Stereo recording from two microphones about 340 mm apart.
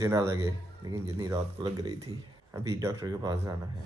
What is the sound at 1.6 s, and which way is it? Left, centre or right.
Speech, centre.